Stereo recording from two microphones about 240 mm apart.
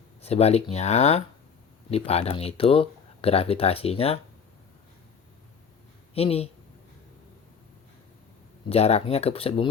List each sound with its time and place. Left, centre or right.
0.2 s speech: left
6.1 s speech: left
8.7 s speech: left